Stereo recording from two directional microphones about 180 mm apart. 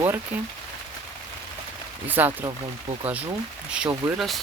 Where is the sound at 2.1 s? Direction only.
10° right (ahead or behind).